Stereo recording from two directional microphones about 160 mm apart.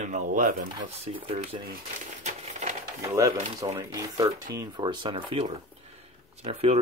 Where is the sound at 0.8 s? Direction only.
40° right (ahead or behind).